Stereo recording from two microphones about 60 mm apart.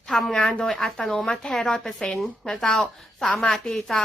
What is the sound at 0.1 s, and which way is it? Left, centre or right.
A woman's voice, centre.